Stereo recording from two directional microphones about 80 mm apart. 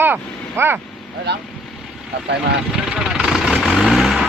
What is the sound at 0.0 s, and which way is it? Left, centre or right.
Vehicle, right.